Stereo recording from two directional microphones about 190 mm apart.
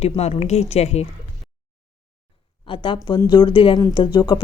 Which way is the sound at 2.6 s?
25° left (ahead or behind).